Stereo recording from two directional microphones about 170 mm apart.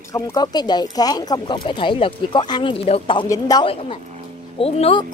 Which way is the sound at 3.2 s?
20° left (ahead or behind).